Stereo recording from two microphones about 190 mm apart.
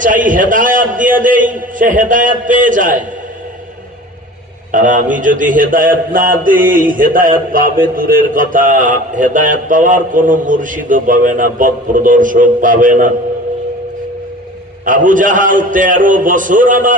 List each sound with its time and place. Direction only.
0.0 s a man's voice: 45° right (ahead or behind)
4.7 s a man's voice: 45° right (ahead or behind)
14.9 s a man's voice: 45° right (ahead or behind)